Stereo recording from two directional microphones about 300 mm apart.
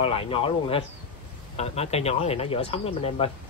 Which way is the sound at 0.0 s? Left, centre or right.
Centre.